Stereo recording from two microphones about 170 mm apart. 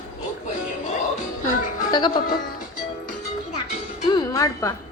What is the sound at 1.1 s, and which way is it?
Music, 50° left (ahead or behind).